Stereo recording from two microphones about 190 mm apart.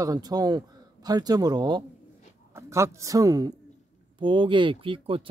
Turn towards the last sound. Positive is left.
turn(degrees=-25)  # may be behind; listen again after turning